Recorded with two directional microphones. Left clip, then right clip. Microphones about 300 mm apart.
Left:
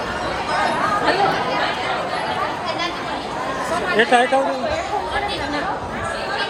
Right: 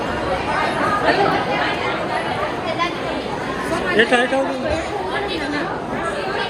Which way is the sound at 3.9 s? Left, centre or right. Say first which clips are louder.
Left 1 dB; left.